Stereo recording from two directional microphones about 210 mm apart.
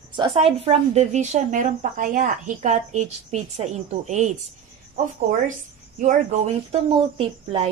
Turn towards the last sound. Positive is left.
turn(degrees=-25)  # may be behind; listen again after turning